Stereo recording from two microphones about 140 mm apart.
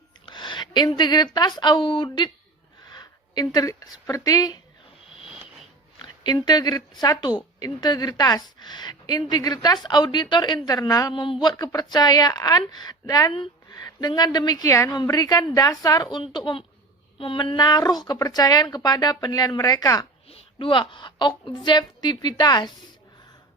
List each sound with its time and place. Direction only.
0.3 s speech: 35° left (ahead or behind)
2.9 s a sound: 30° left (ahead or behind)
4.0 s a woman's voice: 25° left (ahead or behind)
6.0 s a woman's voice: 30° left (ahead or behind)
11.1 s a woman's voice: 35° left (ahead or behind)
20.2 s a woman's voice: 40° left (ahead or behind)